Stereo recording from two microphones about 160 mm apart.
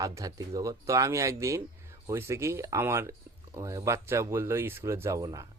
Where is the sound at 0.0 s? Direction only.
20° right (ahead or behind).